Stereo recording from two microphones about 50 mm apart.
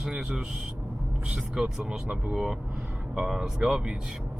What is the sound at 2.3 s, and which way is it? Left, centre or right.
Speech, centre.